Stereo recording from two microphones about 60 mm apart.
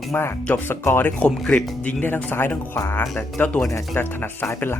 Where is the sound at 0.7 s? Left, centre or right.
Left.